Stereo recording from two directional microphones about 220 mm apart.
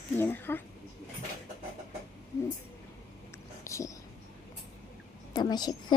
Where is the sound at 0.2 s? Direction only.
10° left (ahead or behind).